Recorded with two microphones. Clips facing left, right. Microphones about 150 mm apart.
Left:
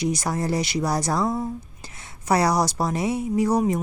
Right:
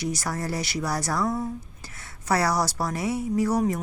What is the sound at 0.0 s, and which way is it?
A woman's voice, 20° left (ahead or behind).